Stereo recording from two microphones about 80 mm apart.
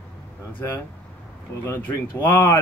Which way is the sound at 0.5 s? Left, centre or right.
Left.